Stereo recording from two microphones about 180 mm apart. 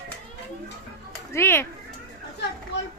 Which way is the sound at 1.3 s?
15° left (ahead or behind).